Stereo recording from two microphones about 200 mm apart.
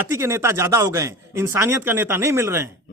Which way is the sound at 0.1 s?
15° right (ahead or behind).